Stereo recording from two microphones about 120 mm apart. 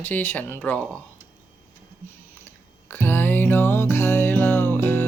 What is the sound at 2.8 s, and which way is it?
Music, 15° left (ahead or behind).